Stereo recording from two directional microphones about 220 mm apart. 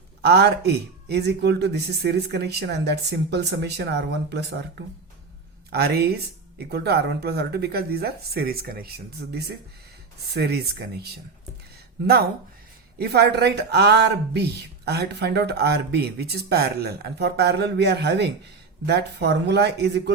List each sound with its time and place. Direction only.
0.2 s speech: 50° right (ahead or behind)
10.3 s speech: 45° right (ahead or behind)
13.0 s speech: 50° right (ahead or behind)